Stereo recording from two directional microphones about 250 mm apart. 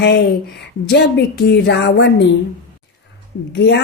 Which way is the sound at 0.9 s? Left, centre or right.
Left.